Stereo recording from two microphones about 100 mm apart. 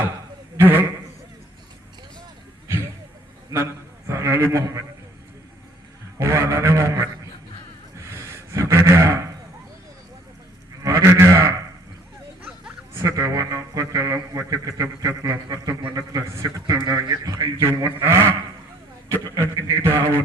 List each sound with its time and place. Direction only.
0.5 s a man's voice: 20° right (ahead or behind)
3.5 s a man's voice: 30° right (ahead or behind)
6.1 s a man's voice: 30° right (ahead or behind)
7.9 s a sound: 30° right (ahead or behind)
10.8 s a man's voice: 30° right (ahead or behind)
12.4 s a sound: 10° right (ahead or behind)
12.9 s a man's voice: 35° right (ahead or behind)
18.0 s a man's voice: 25° right (ahead or behind)